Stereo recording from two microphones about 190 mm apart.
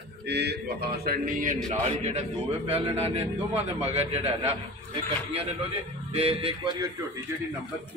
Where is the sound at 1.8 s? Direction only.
30° right (ahead or behind).